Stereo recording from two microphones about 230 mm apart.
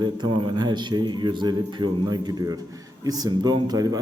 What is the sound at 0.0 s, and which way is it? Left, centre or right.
Speech, centre.